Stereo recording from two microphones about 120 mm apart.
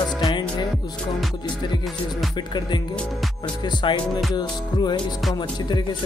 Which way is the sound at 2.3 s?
40° left (ahead or behind).